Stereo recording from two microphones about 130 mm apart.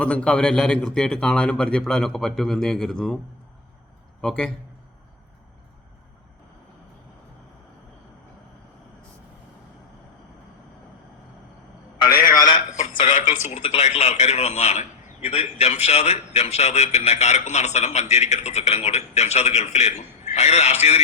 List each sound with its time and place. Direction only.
0.0 s a man's voice: 10° left (ahead or behind)
4.2 s a man's voice: 5° left (ahead or behind)
12.5 s a sound: 80° left
13.1 s a man's voice: 70° left (ahead or behind)